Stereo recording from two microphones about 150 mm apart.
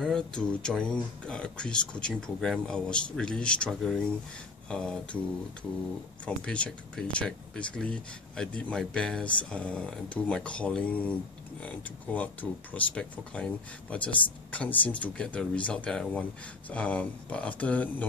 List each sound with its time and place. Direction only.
0.0 s speech: 5° left (ahead or behind)